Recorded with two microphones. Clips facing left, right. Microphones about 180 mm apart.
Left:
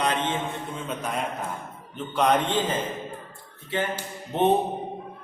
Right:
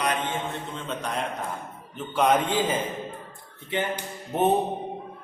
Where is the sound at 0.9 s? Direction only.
5° left (ahead or behind); by 4.4 s 15° right (ahead or behind).